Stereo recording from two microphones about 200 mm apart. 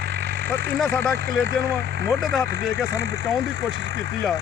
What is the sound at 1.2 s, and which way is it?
Speech, 55° right (ahead or behind).